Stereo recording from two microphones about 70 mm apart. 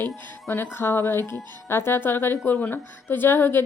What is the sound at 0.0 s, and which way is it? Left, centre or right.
Speech, left.